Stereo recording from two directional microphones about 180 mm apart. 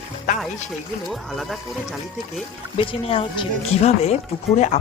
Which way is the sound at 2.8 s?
30° left (ahead or behind).